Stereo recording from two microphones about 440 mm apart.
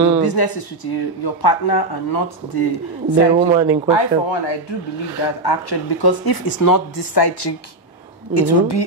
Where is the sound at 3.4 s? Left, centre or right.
Centre.